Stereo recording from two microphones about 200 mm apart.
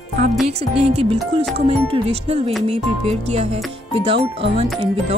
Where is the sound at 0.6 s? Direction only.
30° right (ahead or behind).